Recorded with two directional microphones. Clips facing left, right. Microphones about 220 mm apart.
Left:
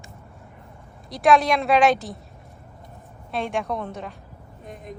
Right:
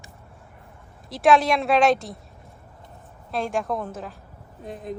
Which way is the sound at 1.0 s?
Centre (ahead or behind).